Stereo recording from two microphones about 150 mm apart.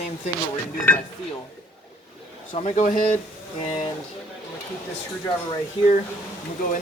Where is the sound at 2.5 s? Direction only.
50° left (ahead or behind).